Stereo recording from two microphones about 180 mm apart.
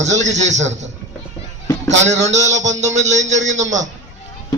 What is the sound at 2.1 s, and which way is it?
A man's voice, 40° right (ahead or behind).